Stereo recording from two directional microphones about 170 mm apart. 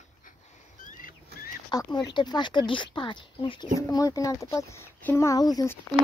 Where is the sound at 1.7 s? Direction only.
25° left (ahead or behind).